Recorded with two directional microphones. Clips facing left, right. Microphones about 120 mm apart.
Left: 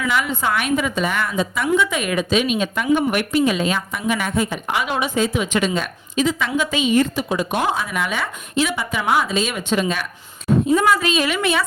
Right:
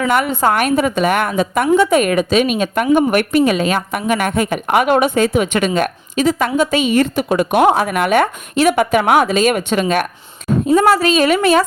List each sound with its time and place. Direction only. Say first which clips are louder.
0.1 s a woman's voice: right 5 dB; 55° right (ahead or behind)
1.0 s speech: right 6 dB; 60° right (ahead or behind)
6.2 s speech: right 7 dB; 45° right (ahead or behind)
10.8 s a woman's voice: right 5 dB; 40° right (ahead or behind)